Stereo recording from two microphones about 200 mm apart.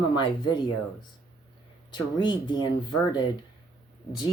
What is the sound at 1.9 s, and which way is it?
Speech, 20° left (ahead or behind).